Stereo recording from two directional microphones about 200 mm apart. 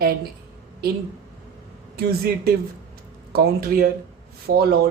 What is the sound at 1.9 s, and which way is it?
Speech, 50° right (ahead or behind).